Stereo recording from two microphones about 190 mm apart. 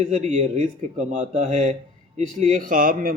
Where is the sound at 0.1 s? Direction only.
40° right (ahead or behind).